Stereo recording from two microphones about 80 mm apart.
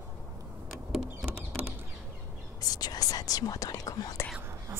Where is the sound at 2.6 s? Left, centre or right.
Left.